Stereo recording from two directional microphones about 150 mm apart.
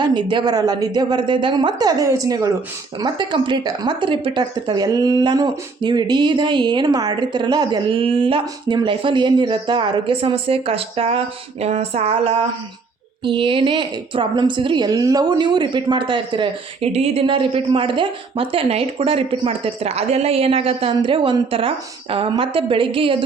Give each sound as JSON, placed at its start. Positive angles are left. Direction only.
{"t": 0.0, "sound": "a woman's voice", "side_deg": -30}